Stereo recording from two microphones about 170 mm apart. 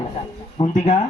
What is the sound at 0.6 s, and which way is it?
Speech, 35° left (ahead or behind).